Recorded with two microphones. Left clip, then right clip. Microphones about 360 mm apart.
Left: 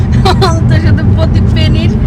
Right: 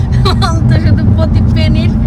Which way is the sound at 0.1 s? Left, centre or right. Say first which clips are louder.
Left 4 dB; centre.